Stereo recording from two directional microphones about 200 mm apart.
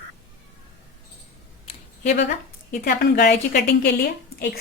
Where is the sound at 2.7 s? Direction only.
50° left (ahead or behind).